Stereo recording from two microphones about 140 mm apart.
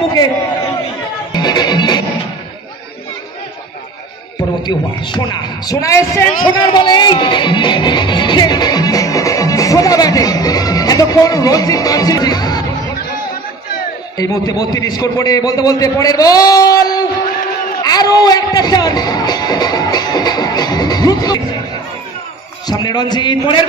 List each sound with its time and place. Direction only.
1.3 s music: 30° left (ahead or behind)
4.6 s a man's voice: 35° left (ahead or behind)
6.6 s speech: 35° left (ahead or behind)
14.1 s a man's voice: 25° left (ahead or behind)
22.7 s a man's voice: 30° left (ahead or behind)